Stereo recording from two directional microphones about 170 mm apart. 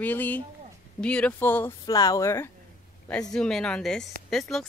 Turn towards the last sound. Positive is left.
turn(degrees=0)  # may be behind; listen again after turning